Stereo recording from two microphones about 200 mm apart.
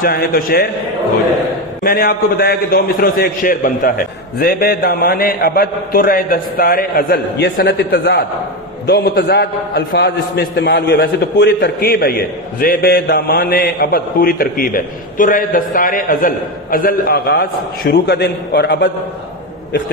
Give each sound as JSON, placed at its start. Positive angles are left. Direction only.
{"t": 0.0, "sound": "a man's voice", "side_deg": 45}
{"t": 1.8, "sound": "a man's voice", "side_deg": 45}